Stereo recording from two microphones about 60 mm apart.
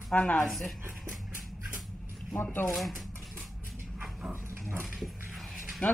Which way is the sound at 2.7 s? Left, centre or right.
Centre.